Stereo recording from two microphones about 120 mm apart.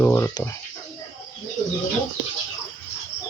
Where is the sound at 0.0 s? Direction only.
20° left (ahead or behind).